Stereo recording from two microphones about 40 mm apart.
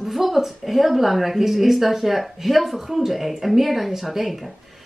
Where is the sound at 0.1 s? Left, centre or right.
Centre.